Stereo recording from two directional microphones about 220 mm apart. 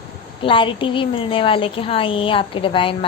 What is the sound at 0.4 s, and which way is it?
A woman's voice, 25° left (ahead or behind).